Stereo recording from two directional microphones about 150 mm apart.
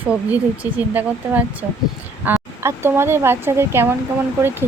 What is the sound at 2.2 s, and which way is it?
Speech, 15° right (ahead or behind).